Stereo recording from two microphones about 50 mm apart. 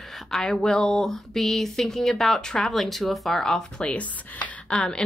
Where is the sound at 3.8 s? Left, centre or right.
Left.